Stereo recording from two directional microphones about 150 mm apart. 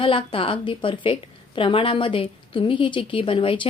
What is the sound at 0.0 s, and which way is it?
A woman's voice, 35° left (ahead or behind).